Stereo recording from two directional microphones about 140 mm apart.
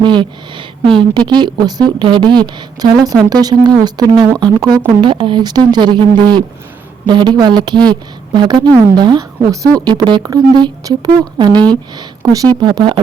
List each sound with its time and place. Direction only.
0.0 s a woman's voice: 35° right (ahead or behind)